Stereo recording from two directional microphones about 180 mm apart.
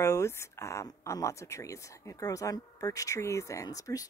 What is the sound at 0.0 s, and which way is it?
Speech, 15° left (ahead or behind).